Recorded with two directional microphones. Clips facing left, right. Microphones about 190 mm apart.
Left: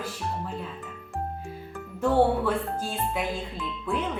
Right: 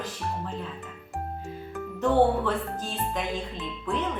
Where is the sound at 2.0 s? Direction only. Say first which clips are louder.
Even; 10° left (ahead or behind).